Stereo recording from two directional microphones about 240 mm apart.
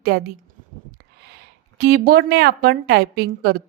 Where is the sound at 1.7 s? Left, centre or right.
Right.